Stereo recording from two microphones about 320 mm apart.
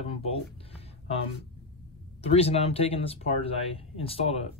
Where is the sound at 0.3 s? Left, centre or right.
Centre.